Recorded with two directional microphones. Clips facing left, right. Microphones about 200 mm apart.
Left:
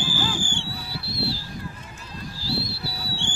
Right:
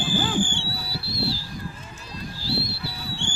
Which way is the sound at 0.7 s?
40° right (ahead or behind).